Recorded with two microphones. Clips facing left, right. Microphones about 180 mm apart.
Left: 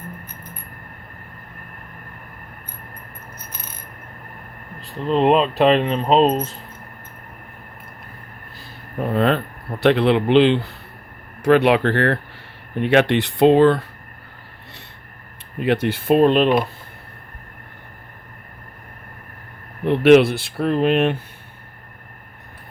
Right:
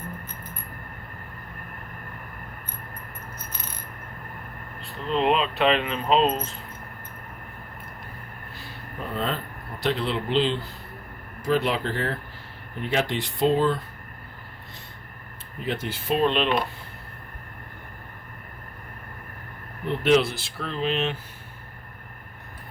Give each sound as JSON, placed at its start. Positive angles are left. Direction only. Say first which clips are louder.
{"t": 4.9, "sound": "speech", "louder": "left 7 dB", "side_deg": 40}
{"t": 9.0, "sound": "speech", "louder": "left 10 dB", "side_deg": 65}
{"t": 15.6, "sound": "speech", "louder": "left 10 dB", "side_deg": 70}
{"t": 19.8, "sound": "speech", "louder": "left 9 dB", "side_deg": 70}